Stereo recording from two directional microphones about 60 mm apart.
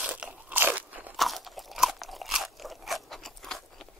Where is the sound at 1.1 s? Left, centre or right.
Centre.